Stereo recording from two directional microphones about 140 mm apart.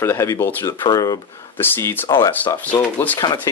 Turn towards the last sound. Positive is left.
turn(degrees=10)  # may be behind; listen again after turning